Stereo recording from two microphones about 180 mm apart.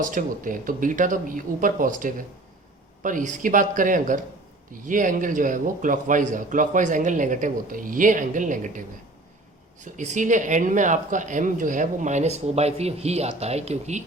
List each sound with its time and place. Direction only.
0.0 s speech: 50° right (ahead or behind)
9.8 s speech: 45° right (ahead or behind)